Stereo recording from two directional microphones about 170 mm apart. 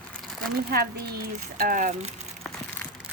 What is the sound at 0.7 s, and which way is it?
Speech, 65° right (ahead or behind).